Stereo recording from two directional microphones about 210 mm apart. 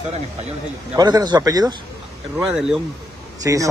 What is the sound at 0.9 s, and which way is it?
Speech, 20° right (ahead or behind).